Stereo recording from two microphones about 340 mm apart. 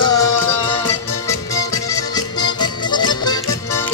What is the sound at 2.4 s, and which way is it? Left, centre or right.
Music, centre.